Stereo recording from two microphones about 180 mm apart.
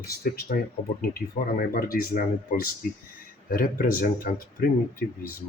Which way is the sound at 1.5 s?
55° left (ahead or behind).